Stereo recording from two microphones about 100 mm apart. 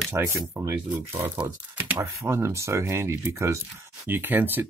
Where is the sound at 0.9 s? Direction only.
20° right (ahead or behind).